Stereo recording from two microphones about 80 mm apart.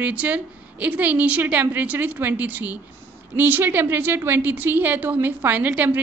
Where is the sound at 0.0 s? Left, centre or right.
Centre.